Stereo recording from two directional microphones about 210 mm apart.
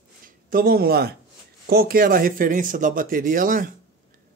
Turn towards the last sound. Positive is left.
turn(degrees=-40)  # may be behind; listen again after turning